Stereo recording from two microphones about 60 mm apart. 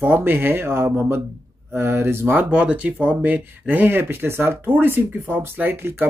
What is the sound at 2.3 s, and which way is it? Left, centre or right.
Speech, right.